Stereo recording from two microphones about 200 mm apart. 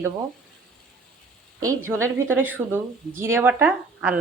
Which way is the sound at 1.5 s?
15° right (ahead or behind).